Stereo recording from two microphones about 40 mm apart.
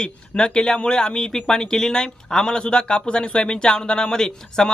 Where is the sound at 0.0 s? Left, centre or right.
Left.